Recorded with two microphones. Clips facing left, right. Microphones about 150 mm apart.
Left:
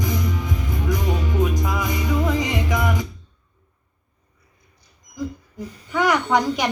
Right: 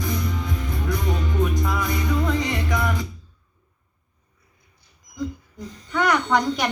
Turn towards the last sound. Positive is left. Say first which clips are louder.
# left 1 dB
turn(degrees=10)  # may be behind; listen again after turning